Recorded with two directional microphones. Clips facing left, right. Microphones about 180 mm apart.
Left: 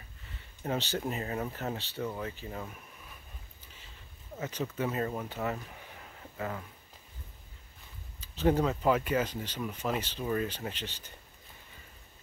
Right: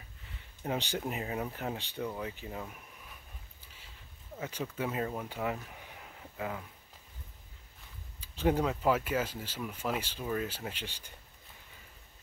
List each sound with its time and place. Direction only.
0.7 s speech: 15° right (ahead or behind)
4.4 s speech: 10° right (ahead or behind)
8.2 s speech: 10° right (ahead or behind)